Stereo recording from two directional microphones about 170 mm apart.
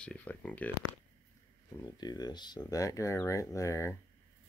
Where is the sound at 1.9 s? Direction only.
25° left (ahead or behind).